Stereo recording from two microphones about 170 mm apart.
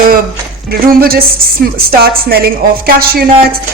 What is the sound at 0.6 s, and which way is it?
Speech, 60° right (ahead or behind).